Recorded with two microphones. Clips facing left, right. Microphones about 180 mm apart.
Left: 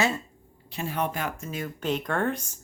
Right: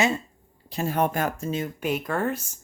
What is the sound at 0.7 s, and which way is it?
Speech, 40° right (ahead or behind).